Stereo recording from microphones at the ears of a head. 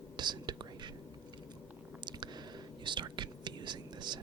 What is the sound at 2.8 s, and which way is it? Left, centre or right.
Whispering, right.